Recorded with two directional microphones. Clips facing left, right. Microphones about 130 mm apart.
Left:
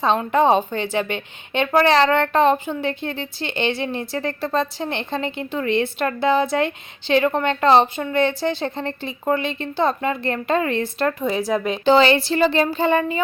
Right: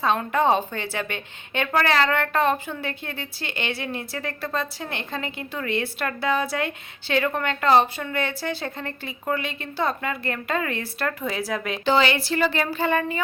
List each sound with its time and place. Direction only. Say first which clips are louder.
0.0 s a woman's voice: left 4 dB; 25° left (ahead or behind)